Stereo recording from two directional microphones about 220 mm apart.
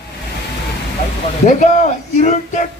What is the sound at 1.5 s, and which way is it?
Speech, 35° left (ahead or behind).